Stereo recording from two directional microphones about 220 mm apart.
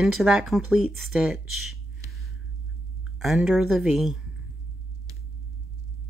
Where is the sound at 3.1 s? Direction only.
Centre (ahead or behind).